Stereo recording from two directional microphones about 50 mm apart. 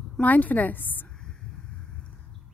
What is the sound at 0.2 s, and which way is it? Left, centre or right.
Speech, left.